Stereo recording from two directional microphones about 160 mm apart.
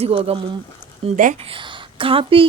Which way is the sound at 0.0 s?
40° right (ahead or behind).